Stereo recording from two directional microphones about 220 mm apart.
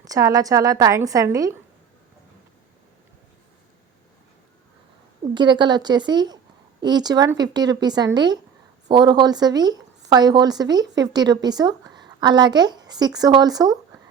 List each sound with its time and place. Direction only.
0.0 s a woman's voice: 15° right (ahead or behind)
5.3 s a woman's voice: 20° right (ahead or behind)